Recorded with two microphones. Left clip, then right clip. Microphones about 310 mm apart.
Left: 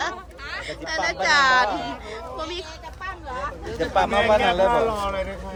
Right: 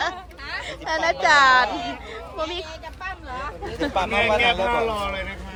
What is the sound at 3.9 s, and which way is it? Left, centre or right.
Speech, left.